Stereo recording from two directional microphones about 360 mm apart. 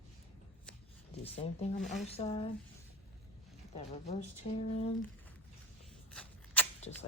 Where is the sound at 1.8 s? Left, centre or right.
Centre.